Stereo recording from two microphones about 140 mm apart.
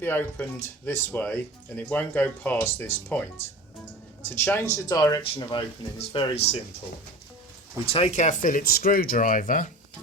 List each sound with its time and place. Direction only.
0.0 s speech: 15° left (ahead or behind)
4.3 s speech: 15° left (ahead or behind); by 6.6 s 45° left (ahead or behind)
7.9 s speech: 45° left (ahead or behind); by 9.6 s 70° left (ahead or behind)